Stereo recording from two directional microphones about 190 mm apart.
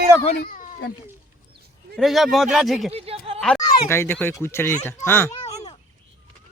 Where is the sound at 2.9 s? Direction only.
30° right (ahead or behind).